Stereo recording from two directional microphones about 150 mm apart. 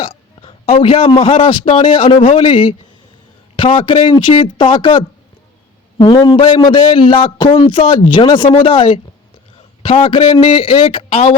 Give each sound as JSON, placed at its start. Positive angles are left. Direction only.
{"t": 0.0, "sound": "a sound", "side_deg": 40}
{"t": 0.8, "sound": "a man's voice", "side_deg": 40}
{"t": 6.1, "sound": "a man's voice", "side_deg": 30}